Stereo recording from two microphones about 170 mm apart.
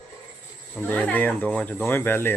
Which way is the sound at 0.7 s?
10° left (ahead or behind).